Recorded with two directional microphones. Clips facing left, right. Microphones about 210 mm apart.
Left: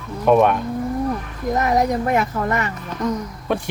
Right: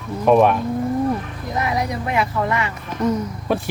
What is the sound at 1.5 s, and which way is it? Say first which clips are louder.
Speech: left 4 dB; 45° left (ahead or behind).